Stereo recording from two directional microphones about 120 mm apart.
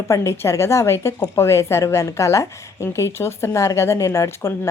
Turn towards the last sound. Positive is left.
turn(degrees=25)  # may be behind; listen again after turning